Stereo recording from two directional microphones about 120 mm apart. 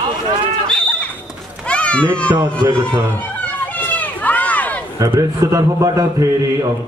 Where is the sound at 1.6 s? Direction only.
10° left (ahead or behind).